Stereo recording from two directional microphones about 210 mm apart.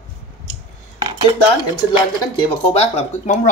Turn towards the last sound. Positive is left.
turn(degrees=35)  # may be behind; listen again after turning